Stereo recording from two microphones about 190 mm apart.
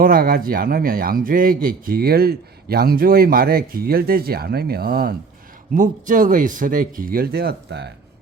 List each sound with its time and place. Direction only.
0.0 s a man's voice: 50° right (ahead or behind)
5.7 s a man's voice: 45° right (ahead or behind); by 7.9 s 60° right (ahead or behind)